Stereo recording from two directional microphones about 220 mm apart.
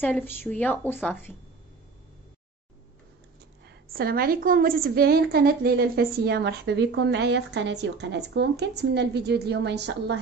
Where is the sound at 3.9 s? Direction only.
45° right (ahead or behind).